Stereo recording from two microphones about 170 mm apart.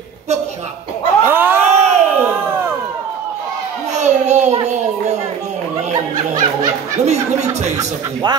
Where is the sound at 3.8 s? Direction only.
40° right (ahead or behind).